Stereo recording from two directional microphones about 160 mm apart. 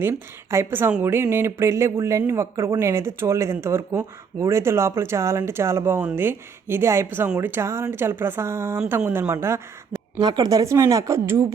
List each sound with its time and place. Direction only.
0.0 s speech: 15° right (ahead or behind)
10.2 s speech: 25° right (ahead or behind)